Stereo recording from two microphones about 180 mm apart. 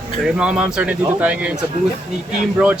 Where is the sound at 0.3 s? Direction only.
5° right (ahead or behind).